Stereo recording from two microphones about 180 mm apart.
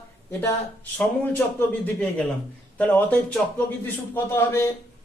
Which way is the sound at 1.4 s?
10° left (ahead or behind).